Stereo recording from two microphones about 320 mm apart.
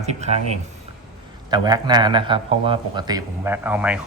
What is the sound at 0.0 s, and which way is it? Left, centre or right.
Speech, right.